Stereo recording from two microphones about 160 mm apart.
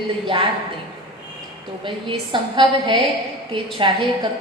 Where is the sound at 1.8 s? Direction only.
30° right (ahead or behind).